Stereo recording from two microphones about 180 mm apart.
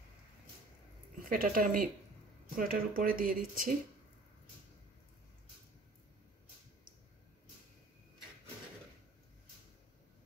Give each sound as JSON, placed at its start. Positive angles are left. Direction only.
{"t": 1.3, "sound": "speech", "side_deg": -50}